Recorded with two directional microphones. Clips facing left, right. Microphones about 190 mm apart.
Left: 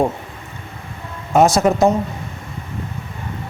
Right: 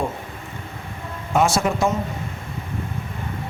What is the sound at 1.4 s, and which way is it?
Speech, 40° left (ahead or behind).